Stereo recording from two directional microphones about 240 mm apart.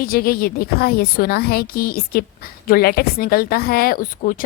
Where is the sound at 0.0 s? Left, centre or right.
Left.